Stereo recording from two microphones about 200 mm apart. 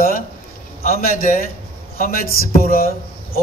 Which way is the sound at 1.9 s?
45° left (ahead or behind).